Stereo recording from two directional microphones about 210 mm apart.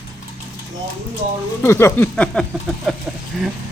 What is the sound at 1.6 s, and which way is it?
Speech, 10° left (ahead or behind).